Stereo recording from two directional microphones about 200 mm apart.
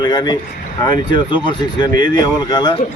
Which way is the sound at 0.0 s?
20° left (ahead or behind).